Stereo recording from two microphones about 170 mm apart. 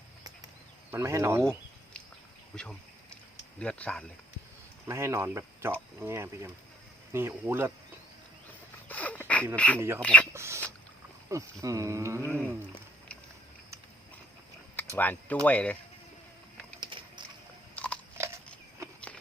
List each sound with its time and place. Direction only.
0.9 s speech: 15° right (ahead or behind)
2.5 s speech: 5° left (ahead or behind)
4.9 s speech: 15° right (ahead or behind)
8.9 s a sound: 10° left (ahead or behind)
9.6 s speech: 5° left (ahead or behind)
10.3 s a sound: 15° right (ahead or behind)
11.6 s speech: 20° right (ahead or behind)
14.9 s speech: 10° left (ahead or behind)
16.8 s boat: 25° right (ahead or behind)
17.7 s biting: 5° left (ahead or behind)